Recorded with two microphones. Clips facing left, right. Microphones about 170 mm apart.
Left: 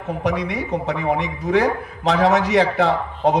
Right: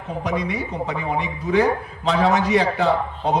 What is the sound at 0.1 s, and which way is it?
Speech, 65° left (ahead or behind).